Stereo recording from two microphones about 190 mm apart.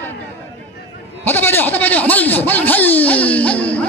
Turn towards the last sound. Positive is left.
turn(degrees=5)  # may be behind; listen again after turning